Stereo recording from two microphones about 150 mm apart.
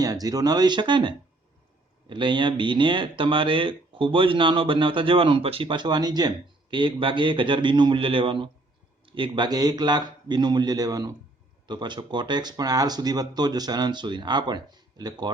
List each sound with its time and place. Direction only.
0.0 s speech: 25° right (ahead or behind)